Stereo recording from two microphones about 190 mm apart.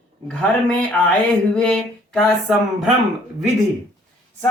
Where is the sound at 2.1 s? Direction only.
Centre (ahead or behind).